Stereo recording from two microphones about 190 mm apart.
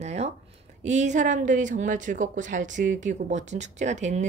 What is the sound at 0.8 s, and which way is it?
A woman's voice, 40° right (ahead or behind).